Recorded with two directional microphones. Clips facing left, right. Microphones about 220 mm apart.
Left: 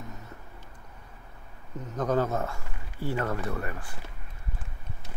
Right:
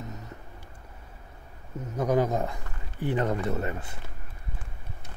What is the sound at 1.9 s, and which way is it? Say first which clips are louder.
A man's voice: right 2 dB; 10° right (ahead or behind).